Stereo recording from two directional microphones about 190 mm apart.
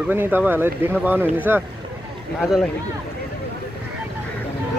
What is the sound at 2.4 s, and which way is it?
Speech, centre (ahead or behind).